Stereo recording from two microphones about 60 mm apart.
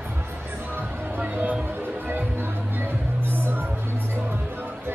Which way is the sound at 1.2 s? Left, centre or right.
Right.